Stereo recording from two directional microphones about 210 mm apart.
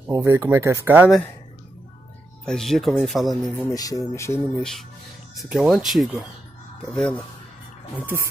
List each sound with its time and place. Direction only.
0.1 s speech: 15° right (ahead or behind)
2.4 s speech: centre (ahead or behind)
3.7 s speech: 15° left (ahead or behind)
4.6 s speech: centre (ahead or behind)